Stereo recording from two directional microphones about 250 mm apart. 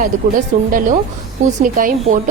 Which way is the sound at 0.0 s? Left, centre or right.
Right.